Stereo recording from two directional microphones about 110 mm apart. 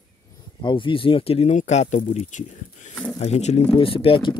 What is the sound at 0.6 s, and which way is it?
Speech, 50° left (ahead or behind).